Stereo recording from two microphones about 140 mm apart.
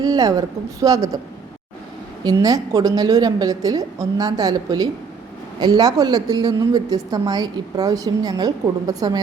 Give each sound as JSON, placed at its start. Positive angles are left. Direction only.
{"t": 0.0, "sound": "a woman's voice", "side_deg": -25}
{"t": 2.2, "sound": "a woman's voice", "side_deg": -25}